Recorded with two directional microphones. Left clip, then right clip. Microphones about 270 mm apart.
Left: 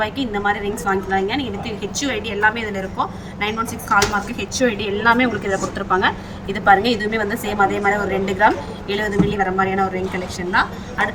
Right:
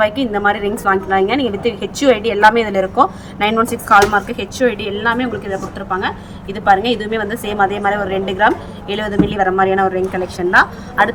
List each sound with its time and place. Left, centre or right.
0.0 s a woman's voice: centre